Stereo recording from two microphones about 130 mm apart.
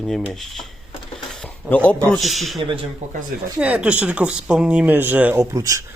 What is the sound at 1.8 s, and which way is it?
Speech, 5° left (ahead or behind).